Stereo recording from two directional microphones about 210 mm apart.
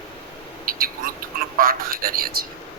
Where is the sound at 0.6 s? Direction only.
45° right (ahead or behind).